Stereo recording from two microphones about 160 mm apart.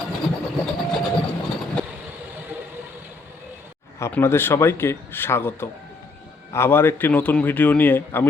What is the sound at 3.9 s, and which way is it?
Speech, 15° left (ahead or behind).